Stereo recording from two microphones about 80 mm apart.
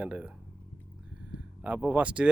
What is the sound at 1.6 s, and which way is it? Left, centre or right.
Speech, centre.